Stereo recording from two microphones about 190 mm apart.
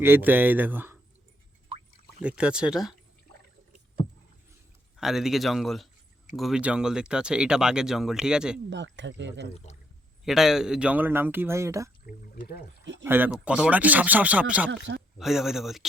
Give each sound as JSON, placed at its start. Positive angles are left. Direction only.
{"t": 0.0, "sound": "speech", "side_deg": -10}
{"t": 2.2, "sound": "speech", "side_deg": -5}
{"t": 4.9, "sound": "speech", "side_deg": 0}
{"t": 8.7, "sound": "speech", "side_deg": -70}
{"t": 9.7, "sound": "speech", "side_deg": 35}
{"t": 10.2, "sound": "speech", "side_deg": 0}
{"t": 12.8, "sound": "speech", "side_deg": -70}
{"t": 13.1, "sound": "speech", "side_deg": -10}
{"t": 14.7, "sound": "speech", "side_deg": -70}
{"t": 15.2, "sound": "speech", "side_deg": 0}